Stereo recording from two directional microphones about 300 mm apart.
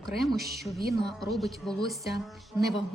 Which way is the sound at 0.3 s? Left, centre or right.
Right.